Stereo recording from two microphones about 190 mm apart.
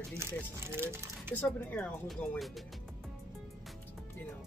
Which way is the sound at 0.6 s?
15° right (ahead or behind).